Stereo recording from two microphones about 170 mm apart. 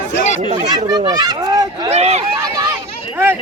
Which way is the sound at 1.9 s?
40° right (ahead or behind).